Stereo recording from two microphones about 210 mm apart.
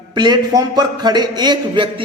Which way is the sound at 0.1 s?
20° right (ahead or behind).